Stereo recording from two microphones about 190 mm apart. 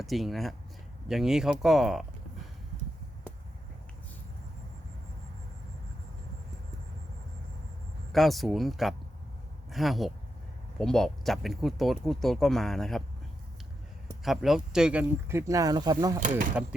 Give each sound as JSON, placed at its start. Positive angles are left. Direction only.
{"t": 0.0, "sound": "speech", "side_deg": 0}
{"t": 8.1, "sound": "speech", "side_deg": 0}
{"t": 14.3, "sound": "speech", "side_deg": 0}
{"t": 16.2, "sound": "speech", "side_deg": -45}